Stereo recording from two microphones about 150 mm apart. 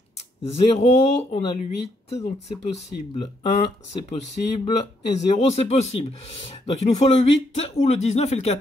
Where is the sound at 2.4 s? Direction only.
45° left (ahead or behind).